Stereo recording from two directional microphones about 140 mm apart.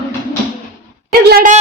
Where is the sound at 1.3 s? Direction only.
65° right (ahead or behind).